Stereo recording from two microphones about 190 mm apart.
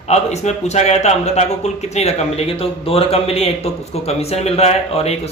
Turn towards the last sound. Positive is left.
turn(degrees=35)  # may be behind; listen again after turning